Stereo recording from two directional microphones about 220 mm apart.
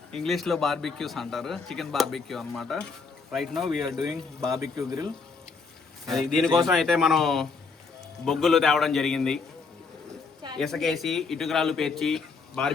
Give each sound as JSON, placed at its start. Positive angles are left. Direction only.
{"t": 0.1, "sound": "speech", "side_deg": 0}
{"t": 4.6, "sound": "speech", "side_deg": -15}
{"t": 6.1, "sound": "speech", "side_deg": 0}
{"t": 10.6, "sound": "speech", "side_deg": 0}